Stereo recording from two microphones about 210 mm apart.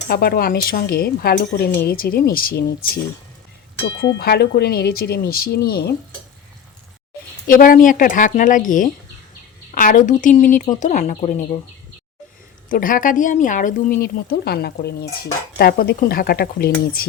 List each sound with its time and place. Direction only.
0.1 s speech: 45° left (ahead or behind)
7.4 s speech: 40° left (ahead or behind)
12.6 s speech: 40° left (ahead or behind)